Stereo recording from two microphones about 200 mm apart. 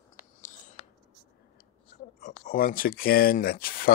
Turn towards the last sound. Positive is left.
turn(degrees=45)  # may be behind; listen again after turning